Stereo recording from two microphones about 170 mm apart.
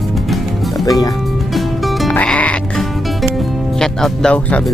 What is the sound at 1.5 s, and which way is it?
Sheep, 5° left (ahead or behind).